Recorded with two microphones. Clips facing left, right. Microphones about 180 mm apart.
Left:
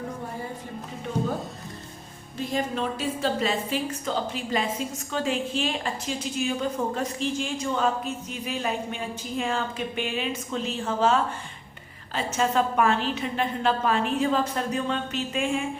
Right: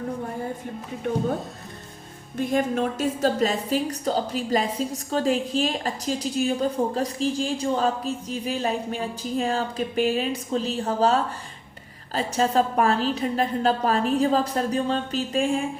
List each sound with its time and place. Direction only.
2.4 s a woman's voice: 55° right (ahead or behind); by 15.6 s 35° right (ahead or behind)